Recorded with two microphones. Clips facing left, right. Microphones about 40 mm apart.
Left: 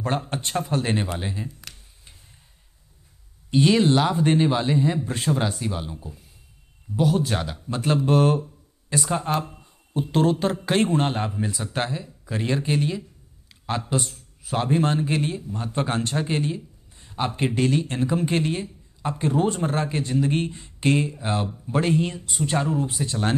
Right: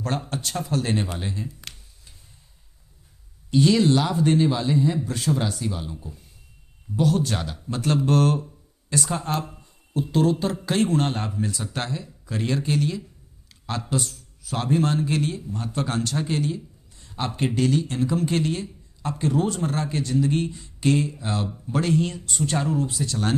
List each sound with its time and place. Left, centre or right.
0.3 s a man's voice: left
3.4 s a man's voice: left
9.4 s a sound: centre
10.4 s speech: left
10.9 s a man's voice: centre
13.5 s a sound: centre
14.6 s a man's voice: left